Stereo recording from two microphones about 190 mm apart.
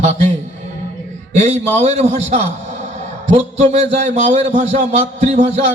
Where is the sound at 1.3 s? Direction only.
35° right (ahead or behind).